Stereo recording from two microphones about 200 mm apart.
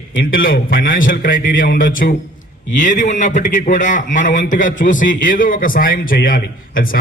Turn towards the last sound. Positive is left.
turn(degrees=45)  # may be behind; listen again after turning